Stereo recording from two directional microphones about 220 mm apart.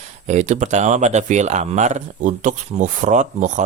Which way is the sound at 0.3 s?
30° right (ahead or behind).